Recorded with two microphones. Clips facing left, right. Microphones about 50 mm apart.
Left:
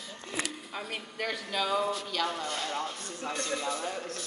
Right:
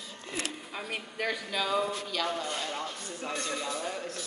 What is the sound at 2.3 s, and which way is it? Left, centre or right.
Speech, centre.